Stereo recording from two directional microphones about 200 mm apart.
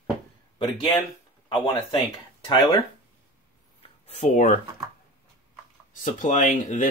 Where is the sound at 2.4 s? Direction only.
20° left (ahead or behind).